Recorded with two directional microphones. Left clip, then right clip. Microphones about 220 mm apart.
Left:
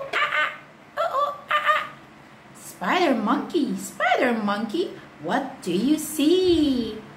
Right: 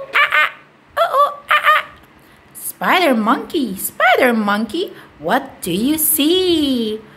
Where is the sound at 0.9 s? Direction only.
45° right (ahead or behind).